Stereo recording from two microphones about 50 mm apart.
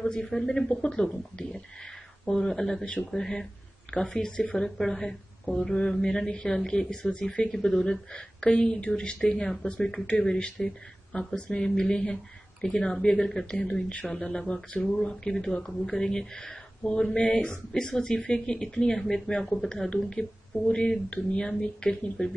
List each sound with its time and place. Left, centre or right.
0.0 s speech: centre
2.2 s a woman's voice: centre